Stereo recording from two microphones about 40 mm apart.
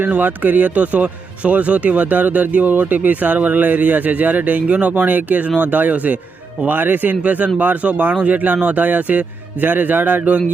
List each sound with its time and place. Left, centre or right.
0.0 s speech: right
4.9 s speech: right